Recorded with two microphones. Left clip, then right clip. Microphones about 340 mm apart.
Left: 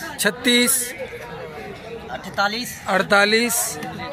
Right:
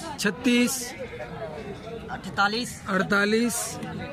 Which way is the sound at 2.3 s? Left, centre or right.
Centre.